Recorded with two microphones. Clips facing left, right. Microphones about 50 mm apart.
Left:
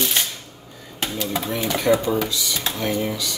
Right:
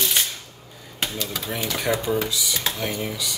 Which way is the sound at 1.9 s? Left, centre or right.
Left.